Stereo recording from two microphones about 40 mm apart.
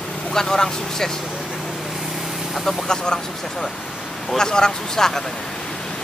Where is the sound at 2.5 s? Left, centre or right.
Centre.